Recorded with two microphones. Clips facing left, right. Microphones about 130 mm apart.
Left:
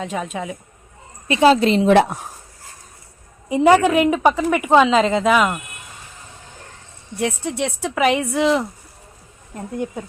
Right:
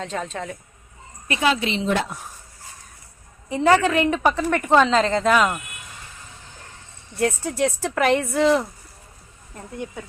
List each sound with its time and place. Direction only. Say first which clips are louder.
0.0 s speech: left 3 dB; 10° left (ahead or behind)
1.3 s a woman's voice: left 8 dB; 30° left (ahead or behind)
1.8 s a woman's voice: left 9 dB; 60° left (ahead or behind)
3.5 s speech: left 4 dB; 15° left (ahead or behind)
7.2 s speech: right 1 dB; centre (ahead or behind)